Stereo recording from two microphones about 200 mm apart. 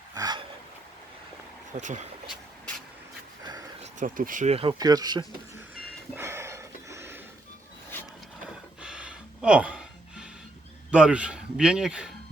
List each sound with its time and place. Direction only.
0.1 s gasp: 20° right (ahead or behind)
1.7 s speech: 35° right (ahead or behind)
4.0 s speech: 40° right (ahead or behind); by 5.2 s 20° right (ahead or behind)
6.1 s a sound: 15° right (ahead or behind)
8.8 s music: 5° right (ahead or behind)
10.9 s speech: 5° right (ahead or behind)